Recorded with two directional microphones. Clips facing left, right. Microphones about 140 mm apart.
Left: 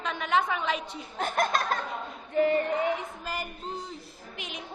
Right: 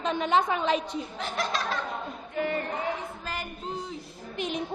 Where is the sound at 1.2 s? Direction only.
50° left (ahead or behind).